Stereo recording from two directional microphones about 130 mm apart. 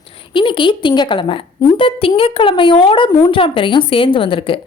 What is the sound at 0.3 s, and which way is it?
A woman's voice, 40° left (ahead or behind).